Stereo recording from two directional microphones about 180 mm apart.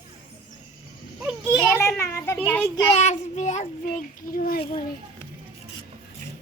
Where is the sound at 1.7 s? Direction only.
15° left (ahead or behind).